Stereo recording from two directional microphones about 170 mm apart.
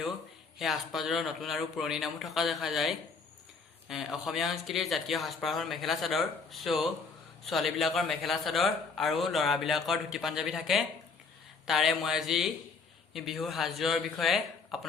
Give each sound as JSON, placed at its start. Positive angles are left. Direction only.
{"t": 0.6, "sound": "a man's voice", "side_deg": 0}